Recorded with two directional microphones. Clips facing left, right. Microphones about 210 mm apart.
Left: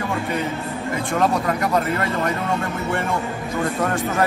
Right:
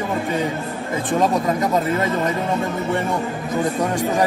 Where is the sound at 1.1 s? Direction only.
20° right (ahead or behind).